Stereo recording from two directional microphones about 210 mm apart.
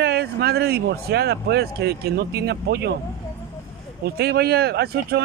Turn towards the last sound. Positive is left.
turn(degrees=-50)  # may be behind; listen again after turning